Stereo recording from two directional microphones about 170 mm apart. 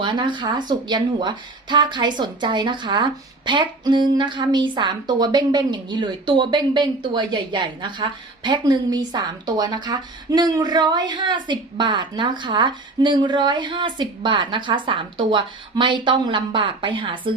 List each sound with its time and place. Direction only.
0.0 s a woman's voice: 30° right (ahead or behind)